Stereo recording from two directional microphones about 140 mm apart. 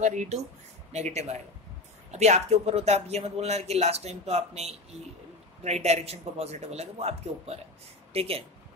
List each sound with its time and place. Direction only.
0.0 s speech: 60° right (ahead or behind)